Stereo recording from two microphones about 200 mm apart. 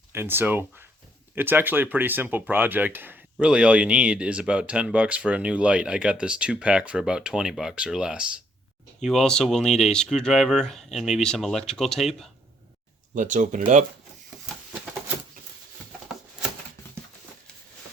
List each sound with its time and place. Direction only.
0.1 s speech: 10° right (ahead or behind)
13.1 s speech: 40° right (ahead or behind)